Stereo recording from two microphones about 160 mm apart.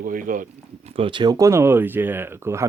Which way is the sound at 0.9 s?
30° right (ahead or behind).